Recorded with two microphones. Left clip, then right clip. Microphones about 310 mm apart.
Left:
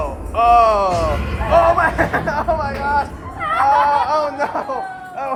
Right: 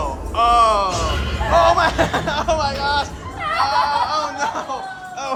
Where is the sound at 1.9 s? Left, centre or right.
Centre.